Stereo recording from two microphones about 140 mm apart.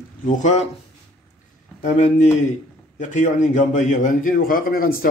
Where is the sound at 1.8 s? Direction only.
65° left (ahead or behind).